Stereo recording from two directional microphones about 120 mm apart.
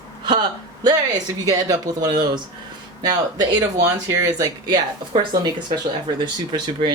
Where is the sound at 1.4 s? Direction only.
35° right (ahead or behind).